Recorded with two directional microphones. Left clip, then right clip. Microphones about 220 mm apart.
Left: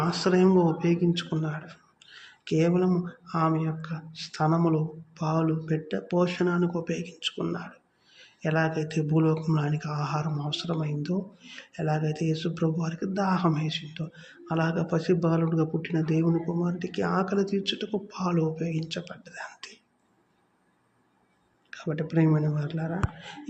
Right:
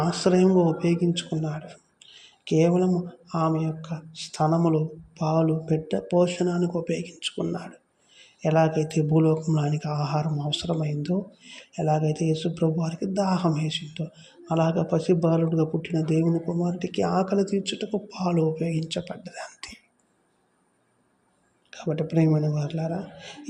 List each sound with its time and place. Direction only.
0.1 s speech: 15° right (ahead or behind)
21.7 s speech: 20° right (ahead or behind)